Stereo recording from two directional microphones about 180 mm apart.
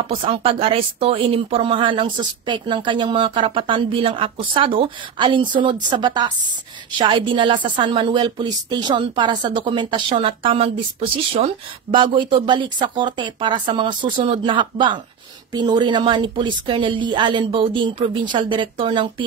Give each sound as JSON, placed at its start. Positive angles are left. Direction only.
{"t": 0.0, "sound": "speech", "side_deg": -30}